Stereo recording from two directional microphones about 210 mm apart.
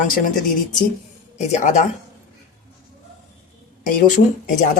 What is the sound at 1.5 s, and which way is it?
Speech, 35° left (ahead or behind).